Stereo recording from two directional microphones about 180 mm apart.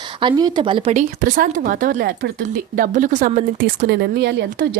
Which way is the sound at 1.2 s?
50° right (ahead or behind).